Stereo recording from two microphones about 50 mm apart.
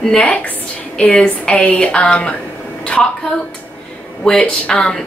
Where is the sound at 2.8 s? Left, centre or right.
Left.